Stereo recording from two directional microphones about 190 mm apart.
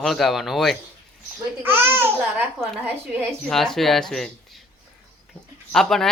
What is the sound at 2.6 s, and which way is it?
Speech, 10° right (ahead or behind).